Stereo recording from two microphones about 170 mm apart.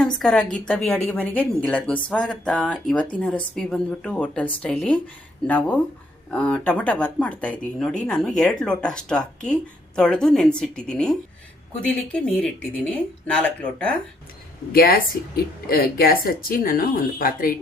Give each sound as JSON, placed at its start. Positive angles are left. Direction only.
{"t": 0.0, "sound": "a woman's voice", "side_deg": 5}
{"t": 14.7, "sound": "speech", "side_deg": 60}